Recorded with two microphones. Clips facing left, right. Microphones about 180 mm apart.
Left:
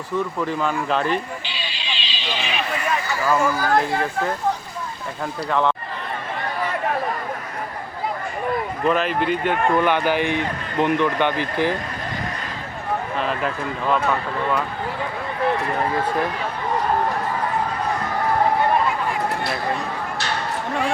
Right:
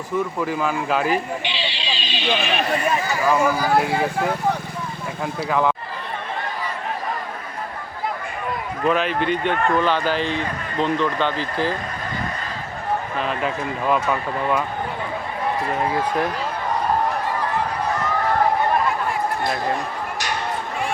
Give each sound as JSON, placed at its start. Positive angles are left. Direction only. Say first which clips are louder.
{"t": 0.3, "sound": "speech", "louder": "even", "side_deg": -5}
{"t": 1.5, "sound": "owl", "louder": "right 5 dB", "side_deg": -25}
{"t": 2.0, "sound": "speech", "louder": "right 6 dB", "side_deg": -60}
{"t": 3.2, "sound": "speech", "louder": "right 1 dB", "side_deg": -10}
{"t": 8.9, "sound": "speech", "louder": "even", "side_deg": 0}
{"t": 13.1, "sound": "speech", "louder": "even", "side_deg": 0}